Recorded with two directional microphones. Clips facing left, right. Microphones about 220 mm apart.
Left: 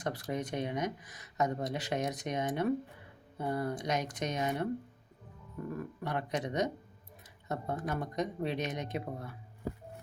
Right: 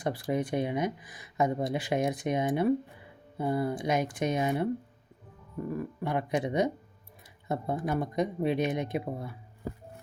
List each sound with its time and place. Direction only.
0.0 s speech: 10° right (ahead or behind)
5.7 s speech: 10° right (ahead or behind)